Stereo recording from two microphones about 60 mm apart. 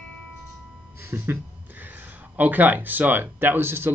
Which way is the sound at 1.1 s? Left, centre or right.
Right.